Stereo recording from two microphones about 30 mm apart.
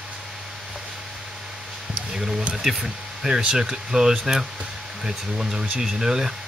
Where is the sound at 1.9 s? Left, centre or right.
Centre.